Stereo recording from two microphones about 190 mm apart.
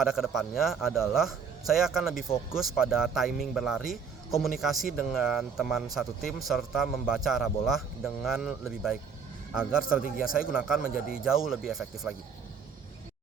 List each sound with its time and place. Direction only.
0.0 s speech: centre (ahead or behind)